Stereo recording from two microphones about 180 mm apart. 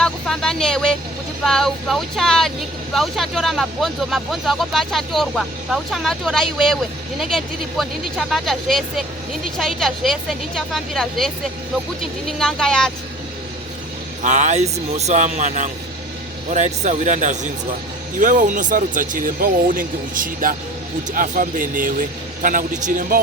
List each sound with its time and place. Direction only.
0.0 s speech: 5° left (ahead or behind)
12.4 s speech: 5° left (ahead or behind)
14.3 s speech: 40° right (ahead or behind)